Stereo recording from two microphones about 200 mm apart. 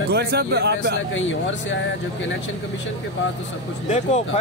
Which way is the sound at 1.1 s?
70° left (ahead or behind).